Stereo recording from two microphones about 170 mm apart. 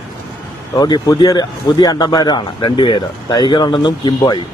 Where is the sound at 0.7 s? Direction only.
25° left (ahead or behind).